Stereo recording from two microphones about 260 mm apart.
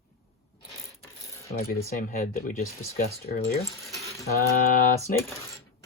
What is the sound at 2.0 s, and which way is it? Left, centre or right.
Speech, left.